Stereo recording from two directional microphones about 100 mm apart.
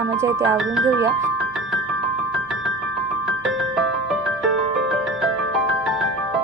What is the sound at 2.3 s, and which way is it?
Music, centre (ahead or behind).